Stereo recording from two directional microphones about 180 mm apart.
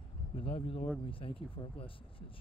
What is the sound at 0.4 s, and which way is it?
Speech, 30° left (ahead or behind).